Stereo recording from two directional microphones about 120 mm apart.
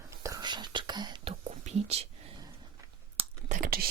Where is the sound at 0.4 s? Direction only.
40° right (ahead or behind).